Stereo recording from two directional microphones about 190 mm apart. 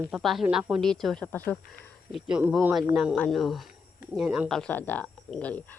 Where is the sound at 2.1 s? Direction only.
5° right (ahead or behind).